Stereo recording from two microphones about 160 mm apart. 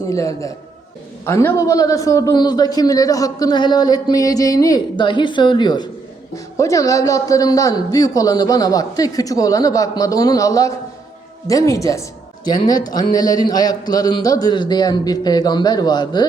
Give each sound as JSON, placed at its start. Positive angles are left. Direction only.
{"t": 0.1, "sound": "a man's voice", "side_deg": 20}